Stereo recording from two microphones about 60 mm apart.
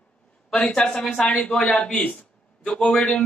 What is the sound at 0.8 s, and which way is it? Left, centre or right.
Speech, centre.